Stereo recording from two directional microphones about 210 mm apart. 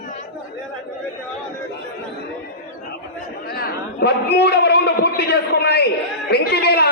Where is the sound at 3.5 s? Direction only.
50° left (ahead or behind).